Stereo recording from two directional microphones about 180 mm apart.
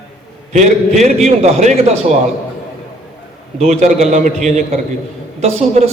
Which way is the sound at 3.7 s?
35° right (ahead or behind).